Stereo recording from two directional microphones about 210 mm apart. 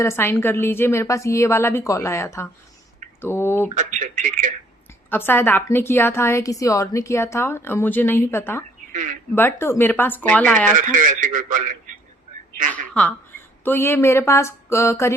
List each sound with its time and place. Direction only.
0.0 s a woman's voice: 10° left (ahead or behind)
3.2 s a sound: 10° left (ahead or behind)
3.8 s a man's voice: 35° right (ahead or behind)
5.1 s a woman's voice: 10° left (ahead or behind)
8.9 s speech: 35° right (ahead or behind)
9.3 s a woman's voice: 10° left (ahead or behind)
10.8 s a man's voice: 40° right (ahead or behind)
12.7 s a woman's voice: 5° left (ahead or behind)